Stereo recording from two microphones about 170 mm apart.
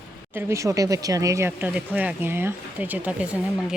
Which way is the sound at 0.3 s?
15° right (ahead or behind).